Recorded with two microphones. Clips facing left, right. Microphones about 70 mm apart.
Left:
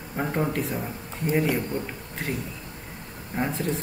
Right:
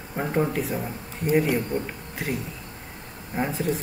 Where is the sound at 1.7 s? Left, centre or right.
Right.